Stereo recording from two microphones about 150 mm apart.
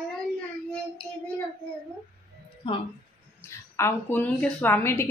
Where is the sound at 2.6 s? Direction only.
35° left (ahead or behind).